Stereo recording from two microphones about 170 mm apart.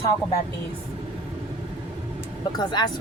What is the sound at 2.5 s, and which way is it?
Speech, 25° left (ahead or behind).